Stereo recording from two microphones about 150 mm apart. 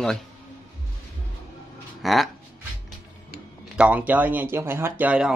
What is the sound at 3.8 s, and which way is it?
Speech, 10° right (ahead or behind).